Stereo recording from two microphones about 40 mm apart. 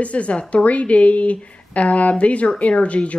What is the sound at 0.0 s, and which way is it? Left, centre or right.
A woman's voice, left.